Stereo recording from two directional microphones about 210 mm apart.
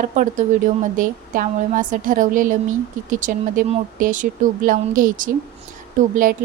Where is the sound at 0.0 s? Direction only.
35° right (ahead or behind).